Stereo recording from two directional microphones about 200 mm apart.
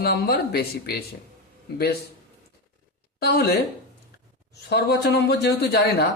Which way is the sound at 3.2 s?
50° left (ahead or behind).